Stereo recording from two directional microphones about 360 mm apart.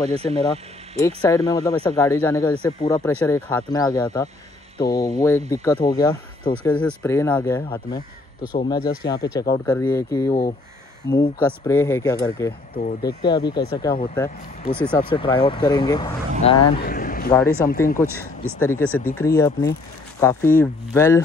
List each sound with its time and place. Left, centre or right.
0.0 s speech: centre
0.9 s speech: centre
9.0 s speech: left
9.5 s speech: centre
16.8 s vehicle: left
17.6 s speech: left
18.2 s speech: centre